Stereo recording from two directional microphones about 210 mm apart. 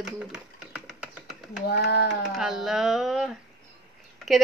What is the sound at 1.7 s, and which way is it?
Speech, 50° left (ahead or behind).